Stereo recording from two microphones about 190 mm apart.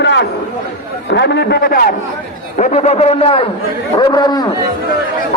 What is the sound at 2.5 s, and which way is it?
A man's voice, 35° left (ahead or behind).